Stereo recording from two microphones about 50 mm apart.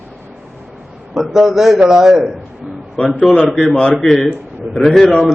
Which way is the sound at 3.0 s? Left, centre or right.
Centre.